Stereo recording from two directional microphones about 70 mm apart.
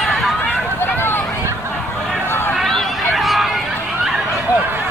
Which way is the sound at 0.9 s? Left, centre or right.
Left.